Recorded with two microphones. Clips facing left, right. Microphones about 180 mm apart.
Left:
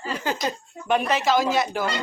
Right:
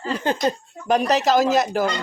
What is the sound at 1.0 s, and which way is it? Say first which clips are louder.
Speech: right 5 dB; 40° right (ahead or behind).